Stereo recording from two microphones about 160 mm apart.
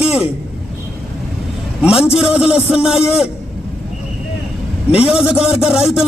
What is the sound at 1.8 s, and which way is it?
A man's voice, 5° right (ahead or behind).